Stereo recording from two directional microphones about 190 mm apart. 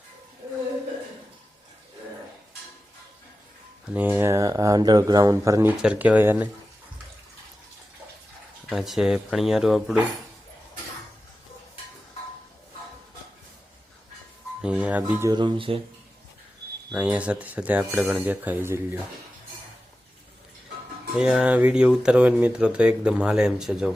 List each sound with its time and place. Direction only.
3.9 s speech: 10° right (ahead or behind)
8.7 s speech: centre (ahead or behind)
14.6 s speech: 5° right (ahead or behind)
15.3 s speech: 25° right (ahead or behind)
16.9 s speech: 5° right (ahead or behind)
21.2 s speech: 5° right (ahead or behind)